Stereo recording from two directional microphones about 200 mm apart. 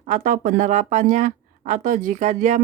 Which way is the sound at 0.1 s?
40° right (ahead or behind).